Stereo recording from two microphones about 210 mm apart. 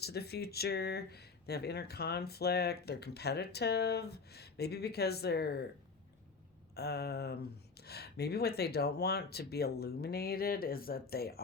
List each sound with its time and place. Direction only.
0.0 s speech: 50° left (ahead or behind)
6.7 s speech: 50° left (ahead or behind)